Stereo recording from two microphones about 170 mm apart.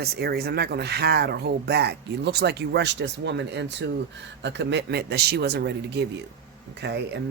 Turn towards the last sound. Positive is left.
turn(degrees=-80)